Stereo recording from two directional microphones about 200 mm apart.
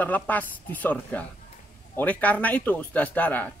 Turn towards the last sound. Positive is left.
turn(degrees=10)  # may be behind; listen again after turning